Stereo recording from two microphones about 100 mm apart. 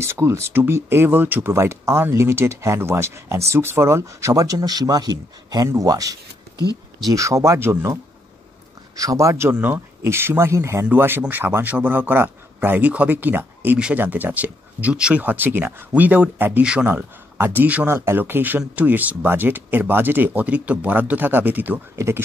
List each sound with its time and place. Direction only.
0.0 s speech: 25° right (ahead or behind)
8.9 s speech: 35° right (ahead or behind)